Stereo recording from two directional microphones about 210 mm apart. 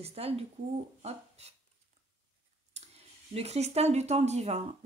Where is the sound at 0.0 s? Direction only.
30° right (ahead or behind).